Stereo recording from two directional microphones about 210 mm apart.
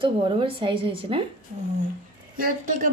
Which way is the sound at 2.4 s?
40° right (ahead or behind).